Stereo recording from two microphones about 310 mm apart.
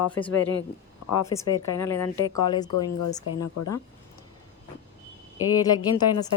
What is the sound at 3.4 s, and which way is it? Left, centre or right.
Speech, left.